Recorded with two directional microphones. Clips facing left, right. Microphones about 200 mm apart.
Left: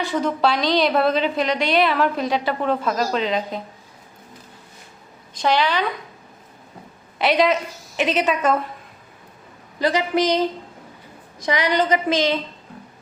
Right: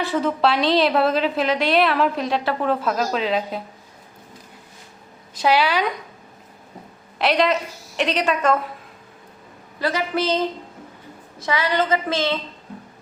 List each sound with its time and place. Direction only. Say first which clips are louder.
0.0 s a woman's voice: even; centre (ahead or behind)
5.3 s a woman's voice: right 1 dB; 10° right (ahead or behind)
7.2 s a woman's voice: left 1 dB; centre (ahead or behind)
9.8 s a woman's voice: left 3 dB; 15° left (ahead or behind)